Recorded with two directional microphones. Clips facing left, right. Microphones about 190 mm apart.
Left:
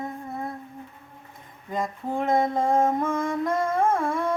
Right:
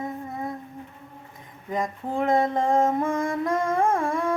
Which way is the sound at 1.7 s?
15° right (ahead or behind).